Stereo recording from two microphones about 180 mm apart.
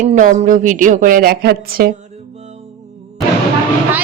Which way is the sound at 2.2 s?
40° right (ahead or behind).